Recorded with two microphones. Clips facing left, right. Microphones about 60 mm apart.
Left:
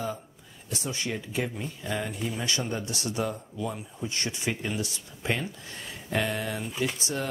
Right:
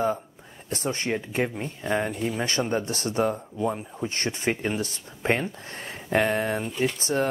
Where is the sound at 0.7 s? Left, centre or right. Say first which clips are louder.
Right 5 dB; right.